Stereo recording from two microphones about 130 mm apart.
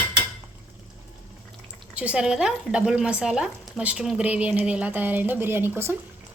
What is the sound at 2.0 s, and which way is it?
Speech, 10° right (ahead or behind).